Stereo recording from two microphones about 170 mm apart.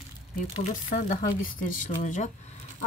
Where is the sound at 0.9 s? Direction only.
55° left (ahead or behind).